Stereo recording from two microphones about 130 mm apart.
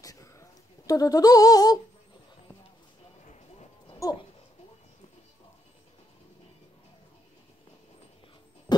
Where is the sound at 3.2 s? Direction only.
55° left (ahead or behind).